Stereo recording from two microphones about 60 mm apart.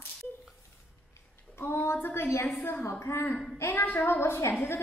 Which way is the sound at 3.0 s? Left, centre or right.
Left.